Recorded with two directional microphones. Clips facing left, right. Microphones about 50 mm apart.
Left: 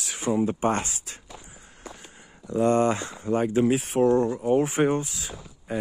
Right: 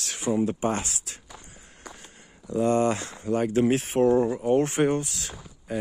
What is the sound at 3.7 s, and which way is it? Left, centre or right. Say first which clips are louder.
Speech: even; centre.